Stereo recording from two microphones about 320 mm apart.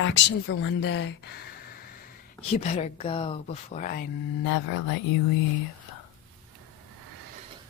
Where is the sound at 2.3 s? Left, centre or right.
Left.